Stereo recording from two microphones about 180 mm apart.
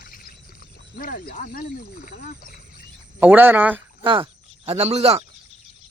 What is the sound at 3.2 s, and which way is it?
Speech, 10° right (ahead or behind).